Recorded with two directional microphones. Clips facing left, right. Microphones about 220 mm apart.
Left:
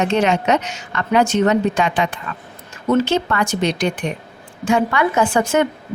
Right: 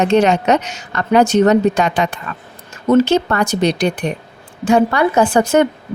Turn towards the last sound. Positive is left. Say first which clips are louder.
# right 4 dB
turn(degrees=-40)  # may be behind; listen again after turning